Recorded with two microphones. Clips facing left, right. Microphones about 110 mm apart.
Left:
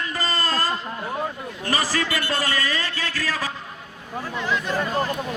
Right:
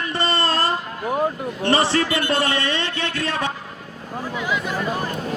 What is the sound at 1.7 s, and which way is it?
A man's voice, 30° right (ahead or behind).